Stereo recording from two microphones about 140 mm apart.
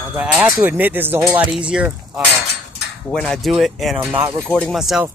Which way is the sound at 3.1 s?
5° left (ahead or behind).